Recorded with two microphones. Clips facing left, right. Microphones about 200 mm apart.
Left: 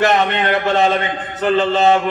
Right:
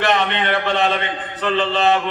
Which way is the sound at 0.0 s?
45° left (ahead or behind).